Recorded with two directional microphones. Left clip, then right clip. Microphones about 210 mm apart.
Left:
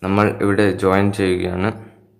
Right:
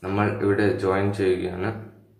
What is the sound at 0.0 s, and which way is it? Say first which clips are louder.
Speech: left 6 dB; 50° left (ahead or behind).